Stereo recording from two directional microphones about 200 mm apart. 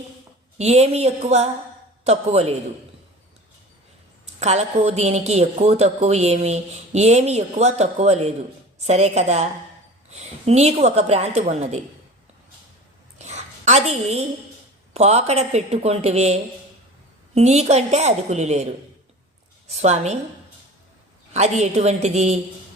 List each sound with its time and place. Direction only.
0.6 s speech: 30° right (ahead or behind)
4.4 s speech: 35° right (ahead or behind)
13.1 s a sound: 35° right (ahead or behind)
14.9 s speech: 30° right (ahead or behind)
21.3 s speech: 35° right (ahead or behind)